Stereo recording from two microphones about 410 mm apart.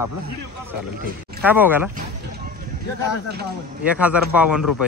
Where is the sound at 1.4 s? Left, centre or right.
Centre.